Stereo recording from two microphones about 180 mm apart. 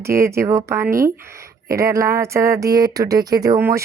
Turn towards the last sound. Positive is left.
turn(degrees=-15)  # may be behind; listen again after turning